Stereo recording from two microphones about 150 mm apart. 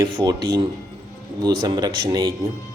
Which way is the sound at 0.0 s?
30° right (ahead or behind).